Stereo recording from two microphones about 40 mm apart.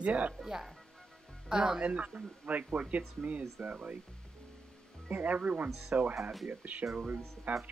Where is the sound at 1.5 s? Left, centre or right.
Right.